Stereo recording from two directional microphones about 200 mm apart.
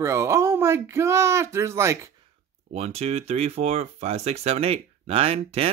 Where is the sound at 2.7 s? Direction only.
30° right (ahead or behind).